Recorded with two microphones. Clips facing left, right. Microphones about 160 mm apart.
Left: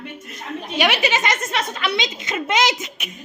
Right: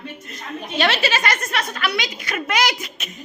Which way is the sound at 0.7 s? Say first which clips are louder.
Left 1 dB; 15° left (ahead or behind).